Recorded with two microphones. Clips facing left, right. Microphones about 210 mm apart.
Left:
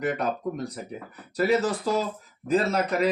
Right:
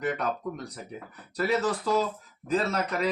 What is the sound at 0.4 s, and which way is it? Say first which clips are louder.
Speech: left 5 dB; 30° left (ahead or behind).